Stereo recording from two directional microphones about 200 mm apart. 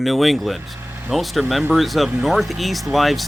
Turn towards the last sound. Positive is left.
turn(degrees=0)  # may be behind; listen again after turning